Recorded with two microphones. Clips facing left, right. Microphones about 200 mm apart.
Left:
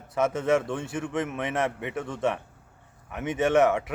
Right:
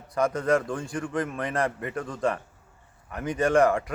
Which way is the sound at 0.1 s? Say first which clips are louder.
Even; 5° left (ahead or behind).